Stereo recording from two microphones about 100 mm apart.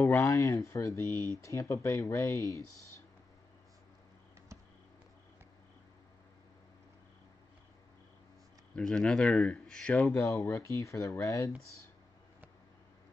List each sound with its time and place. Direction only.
0.0 s speech: 25° left (ahead or behind)
8.7 s speech: 5° left (ahead or behind)
10.0 s speech: 30° left (ahead or behind)